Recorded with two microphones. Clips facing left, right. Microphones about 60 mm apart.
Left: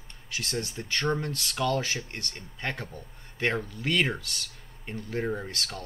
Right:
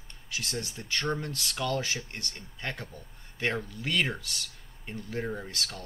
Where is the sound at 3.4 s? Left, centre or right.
Centre.